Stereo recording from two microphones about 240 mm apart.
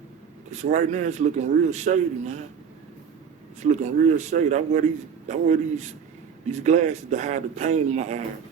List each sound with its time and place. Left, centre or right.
0.5 s a man's voice: right
3.6 s a man's voice: right